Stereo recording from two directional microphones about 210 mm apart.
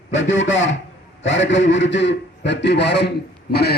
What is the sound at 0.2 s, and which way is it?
A man's voice, 60° left (ahead or behind).